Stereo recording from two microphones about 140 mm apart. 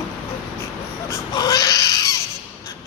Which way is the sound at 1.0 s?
30° left (ahead or behind).